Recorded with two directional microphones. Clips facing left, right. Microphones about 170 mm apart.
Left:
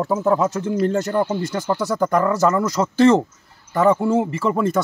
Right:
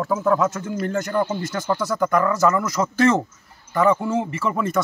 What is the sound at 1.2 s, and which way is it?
Speech, 5° left (ahead or behind).